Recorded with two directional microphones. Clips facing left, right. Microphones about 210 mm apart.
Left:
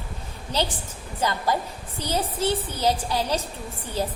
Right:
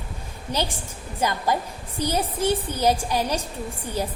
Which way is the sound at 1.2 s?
15° right (ahead or behind).